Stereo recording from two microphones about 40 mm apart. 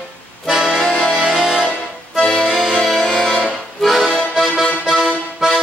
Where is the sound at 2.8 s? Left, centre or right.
Centre.